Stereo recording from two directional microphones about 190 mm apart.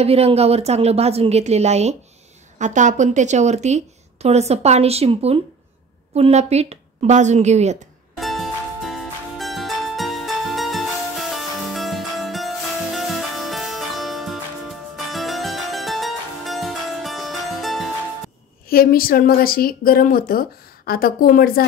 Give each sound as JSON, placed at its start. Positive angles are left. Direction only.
{"t": 0.0, "sound": "a woman's voice", "side_deg": -30}
{"t": 8.2, "sound": "music", "side_deg": 0}
{"t": 15.0, "sound": "harpsichord", "side_deg": 0}
{"t": 18.7, "sound": "a woman's voice", "side_deg": 50}